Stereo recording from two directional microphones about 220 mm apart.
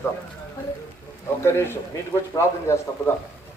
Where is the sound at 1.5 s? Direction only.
10° left (ahead or behind).